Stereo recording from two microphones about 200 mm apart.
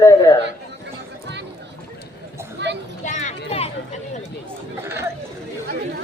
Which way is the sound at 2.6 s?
60° right (ahead or behind).